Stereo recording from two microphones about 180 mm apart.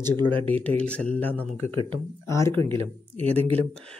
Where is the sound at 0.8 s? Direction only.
5° left (ahead or behind).